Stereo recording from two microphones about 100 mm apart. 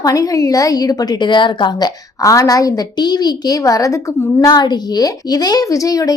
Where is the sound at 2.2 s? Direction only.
35° left (ahead or behind).